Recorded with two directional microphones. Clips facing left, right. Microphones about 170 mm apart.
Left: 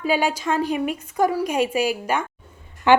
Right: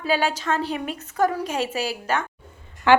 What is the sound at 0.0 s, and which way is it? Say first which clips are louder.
A woman's voice: left 2 dB; 15° left (ahead or behind).